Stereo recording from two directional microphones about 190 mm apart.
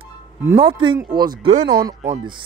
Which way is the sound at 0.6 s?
25° right (ahead or behind).